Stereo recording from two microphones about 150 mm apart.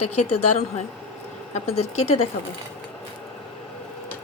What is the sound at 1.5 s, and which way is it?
Speech, 45° left (ahead or behind).